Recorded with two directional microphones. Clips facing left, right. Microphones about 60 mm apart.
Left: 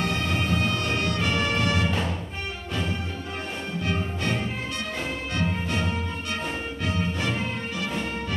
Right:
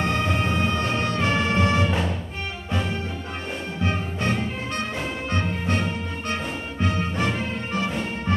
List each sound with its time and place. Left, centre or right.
0.0 s music: right